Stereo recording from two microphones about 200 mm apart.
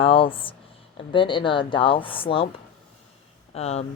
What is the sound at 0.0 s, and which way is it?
Speech, 25° left (ahead or behind).